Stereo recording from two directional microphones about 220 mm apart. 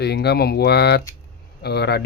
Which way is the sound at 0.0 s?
50° left (ahead or behind).